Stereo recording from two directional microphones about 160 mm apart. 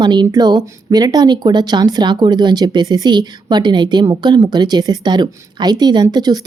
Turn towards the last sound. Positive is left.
turn(degrees=-25)  # may be behind; listen again after turning